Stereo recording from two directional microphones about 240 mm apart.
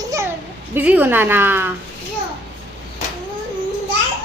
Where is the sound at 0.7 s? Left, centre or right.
Centre.